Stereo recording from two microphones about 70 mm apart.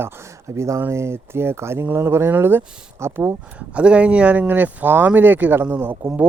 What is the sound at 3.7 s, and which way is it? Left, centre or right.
Speech, centre.